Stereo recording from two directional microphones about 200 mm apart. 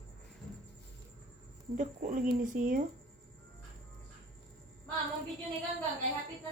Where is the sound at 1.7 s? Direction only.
40° right (ahead or behind).